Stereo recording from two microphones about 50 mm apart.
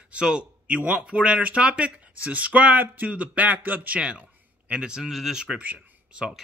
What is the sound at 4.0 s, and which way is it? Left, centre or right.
Speech, right.